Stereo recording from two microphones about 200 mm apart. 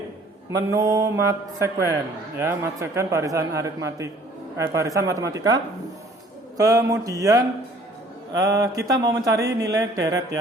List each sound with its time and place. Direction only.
0.5 s speech: 15° right (ahead or behind)